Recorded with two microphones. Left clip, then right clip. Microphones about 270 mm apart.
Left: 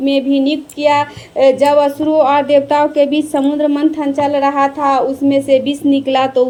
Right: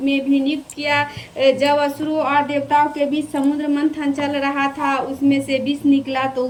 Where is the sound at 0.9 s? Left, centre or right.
Centre.